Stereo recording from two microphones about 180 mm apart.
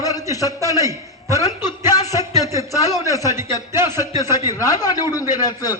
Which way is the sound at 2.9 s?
15° right (ahead or behind).